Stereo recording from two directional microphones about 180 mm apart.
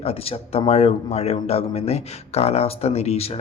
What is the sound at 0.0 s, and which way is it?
Speech, 35° left (ahead or behind).